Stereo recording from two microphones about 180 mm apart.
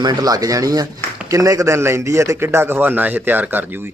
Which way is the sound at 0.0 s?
20° right (ahead or behind).